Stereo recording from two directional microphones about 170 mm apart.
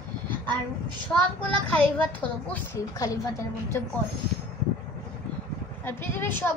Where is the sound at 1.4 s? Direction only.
10° left (ahead or behind).